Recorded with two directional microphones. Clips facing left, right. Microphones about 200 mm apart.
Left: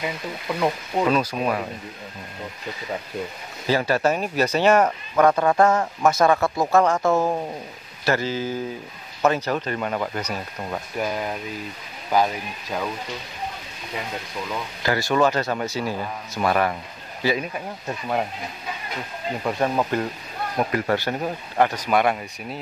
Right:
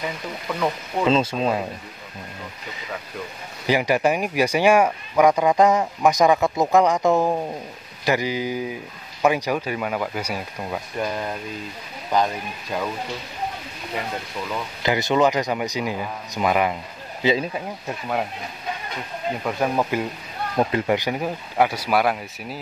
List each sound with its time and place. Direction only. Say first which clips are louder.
0.0 s speech: even; 15° left (ahead or behind)
1.0 s speech: right 3 dB; 25° right (ahead or behind)
3.6 s speech: right 1 dB; 15° right (ahead or behind)
11.0 s speech: left 1 dB; 10° left (ahead or behind)
14.8 s speech: right 1 dB; 20° right (ahead or behind)
19.4 s speech: left 1 dB; 5° right (ahead or behind)
20.5 s speech: right 2 dB; 20° right (ahead or behind); by 22.6 s centre (ahead or behind)